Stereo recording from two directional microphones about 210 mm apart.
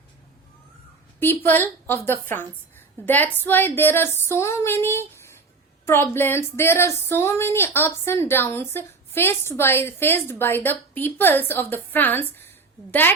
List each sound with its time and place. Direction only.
1.2 s speech: 10° left (ahead or behind)